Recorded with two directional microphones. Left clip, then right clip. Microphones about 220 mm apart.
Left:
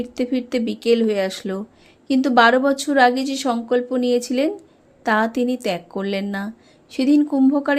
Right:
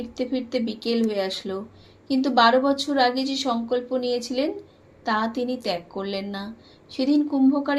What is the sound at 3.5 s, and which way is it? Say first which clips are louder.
Speech: left 6 dB; 90° left.